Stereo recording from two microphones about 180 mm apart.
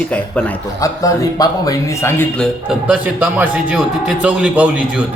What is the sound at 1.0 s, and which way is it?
Speech, 20° left (ahead or behind).